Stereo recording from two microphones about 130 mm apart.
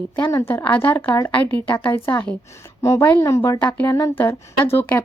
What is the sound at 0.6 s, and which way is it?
A woman's voice, 10° left (ahead or behind).